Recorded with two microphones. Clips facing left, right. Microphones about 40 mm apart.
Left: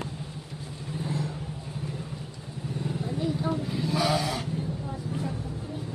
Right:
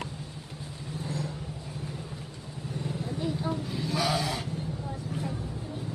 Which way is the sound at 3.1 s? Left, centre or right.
Centre.